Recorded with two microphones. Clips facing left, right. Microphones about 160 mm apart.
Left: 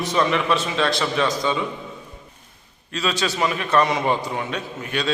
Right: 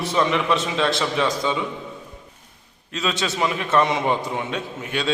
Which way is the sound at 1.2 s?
5° right (ahead or behind).